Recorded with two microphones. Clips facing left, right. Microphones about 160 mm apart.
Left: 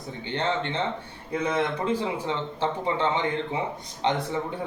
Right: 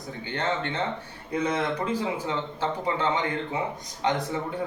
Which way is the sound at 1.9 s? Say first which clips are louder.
Left 1 dB; 30° left (ahead or behind).